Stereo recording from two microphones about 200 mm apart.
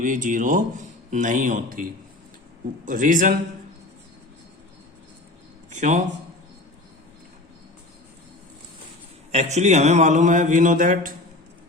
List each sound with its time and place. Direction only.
0.0 s a man's voice: 40° right (ahead or behind)
2.8 s a man's voice: 40° right (ahead or behind)
5.7 s a man's voice: 40° right (ahead or behind)
9.3 s a man's voice: 35° right (ahead or behind)